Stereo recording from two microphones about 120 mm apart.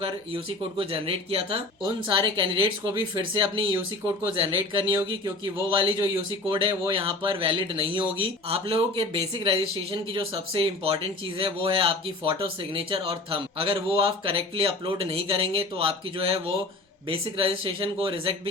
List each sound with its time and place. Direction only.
0.0 s speech: 50° right (ahead or behind)
1.8 s speech: 40° right (ahead or behind)